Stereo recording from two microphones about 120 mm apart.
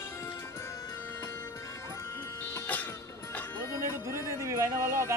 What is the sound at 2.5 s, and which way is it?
Music, 15° left (ahead or behind).